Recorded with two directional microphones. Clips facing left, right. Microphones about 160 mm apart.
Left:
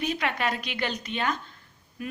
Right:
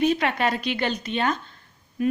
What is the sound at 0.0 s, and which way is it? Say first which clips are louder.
A woman's voice: right 6 dB; 30° right (ahead or behind).